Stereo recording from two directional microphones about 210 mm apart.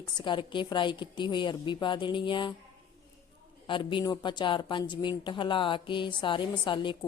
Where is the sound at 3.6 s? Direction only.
25° left (ahead or behind).